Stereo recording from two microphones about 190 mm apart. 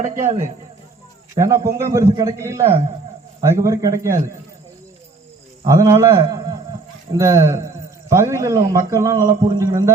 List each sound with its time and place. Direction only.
0.3 s a man's voice: 40° right (ahead or behind)
1.4 s a man's voice: 15° right (ahead or behind)
5.6 s a man's voice: 15° right (ahead or behind)